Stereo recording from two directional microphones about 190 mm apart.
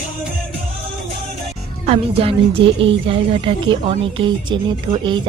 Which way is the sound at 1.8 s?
30° right (ahead or behind).